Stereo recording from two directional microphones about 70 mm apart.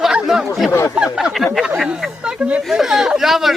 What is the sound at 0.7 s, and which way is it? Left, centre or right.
Speech, left.